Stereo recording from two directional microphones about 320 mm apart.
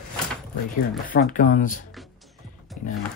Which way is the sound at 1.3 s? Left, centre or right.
Left.